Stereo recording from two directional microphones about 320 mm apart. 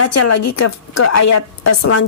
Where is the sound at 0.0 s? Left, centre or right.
Left.